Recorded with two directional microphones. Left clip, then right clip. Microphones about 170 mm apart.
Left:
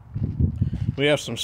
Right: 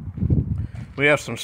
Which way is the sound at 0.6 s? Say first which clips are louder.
Right 3 dB; 10° left (ahead or behind).